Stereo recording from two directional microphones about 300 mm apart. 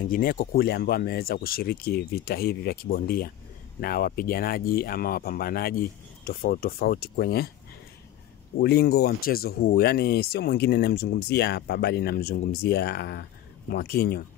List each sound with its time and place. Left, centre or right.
0.1 s speech: left
8.5 s speech: left